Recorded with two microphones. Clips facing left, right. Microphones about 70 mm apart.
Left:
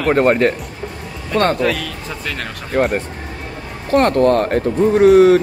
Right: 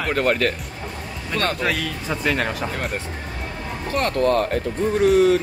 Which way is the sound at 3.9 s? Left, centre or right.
Left.